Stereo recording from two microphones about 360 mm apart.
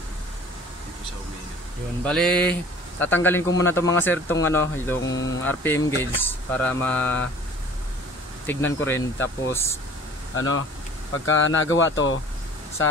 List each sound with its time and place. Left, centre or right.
2.0 s speech: centre
8.5 s speech: centre
10.3 s speech: left